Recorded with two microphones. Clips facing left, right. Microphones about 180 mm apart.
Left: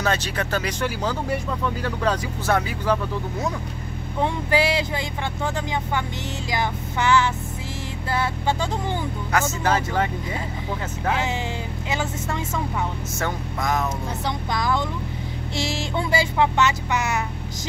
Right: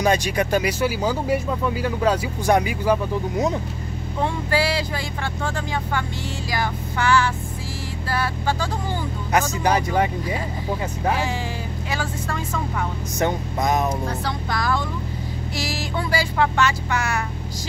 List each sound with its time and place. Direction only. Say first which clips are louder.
0.0 s speech: right 4 dB; 15° right (ahead or behind)
4.2 s speech: left 1 dB; 20° left (ahead or behind)
9.3 s speech: right 2 dB; 15° right (ahead or behind)
11.9 s speech: left 1 dB; 20° left (ahead or behind)
13.2 s vehicle: right 5 dB; 20° right (ahead or behind)
14.2 s speech: even; 20° left (ahead or behind)